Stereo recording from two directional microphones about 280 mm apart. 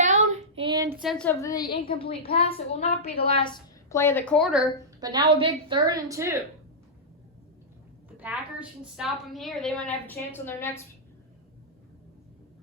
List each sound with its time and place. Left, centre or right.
0.0 s child singing: right
1.0 s a woman's voice: centre
4.9 s a woman's voice: centre
8.2 s a woman's voice: centre